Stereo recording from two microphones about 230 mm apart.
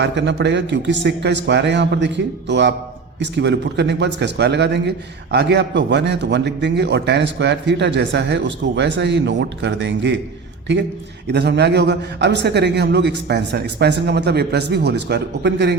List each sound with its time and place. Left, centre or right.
0.0 s a man's voice: right
11.3 s a man's voice: right